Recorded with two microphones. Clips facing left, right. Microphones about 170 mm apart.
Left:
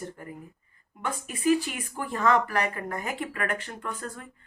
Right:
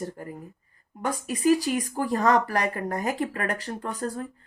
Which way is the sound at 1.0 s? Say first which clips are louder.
Right 3 dB; 40° right (ahead or behind).